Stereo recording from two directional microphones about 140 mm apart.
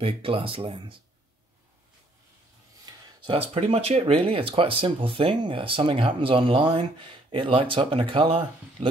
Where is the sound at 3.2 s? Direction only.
45° right (ahead or behind).